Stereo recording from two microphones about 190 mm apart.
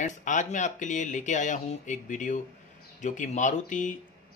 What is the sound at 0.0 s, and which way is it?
Speech, 40° left (ahead or behind).